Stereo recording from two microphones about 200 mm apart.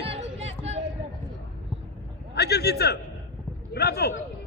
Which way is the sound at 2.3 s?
55° left (ahead or behind).